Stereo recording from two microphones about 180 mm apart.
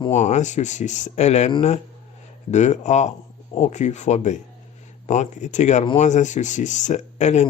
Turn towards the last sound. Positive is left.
turn(degrees=40)  # may be behind; listen again after turning